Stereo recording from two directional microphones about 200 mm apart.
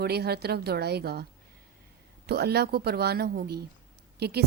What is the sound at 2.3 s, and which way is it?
Speech, 50° right (ahead or behind).